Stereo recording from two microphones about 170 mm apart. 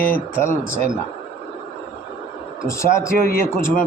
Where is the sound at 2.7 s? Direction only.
15° left (ahead or behind).